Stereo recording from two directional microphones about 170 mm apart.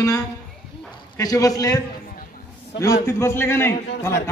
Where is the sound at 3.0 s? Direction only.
15° left (ahead or behind).